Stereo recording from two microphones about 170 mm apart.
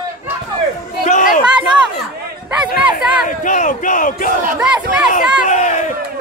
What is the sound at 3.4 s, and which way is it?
Speech, 50° left (ahead or behind).